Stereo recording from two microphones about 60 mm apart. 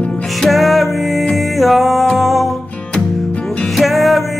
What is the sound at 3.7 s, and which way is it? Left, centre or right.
Music, centre.